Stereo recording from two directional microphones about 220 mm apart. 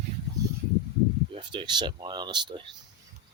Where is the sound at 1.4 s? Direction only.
20° right (ahead or behind).